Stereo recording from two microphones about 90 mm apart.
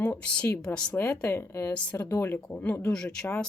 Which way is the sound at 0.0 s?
20° left (ahead or behind).